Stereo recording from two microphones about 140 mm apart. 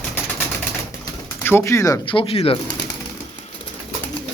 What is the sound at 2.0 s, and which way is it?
Speech, 40° left (ahead or behind).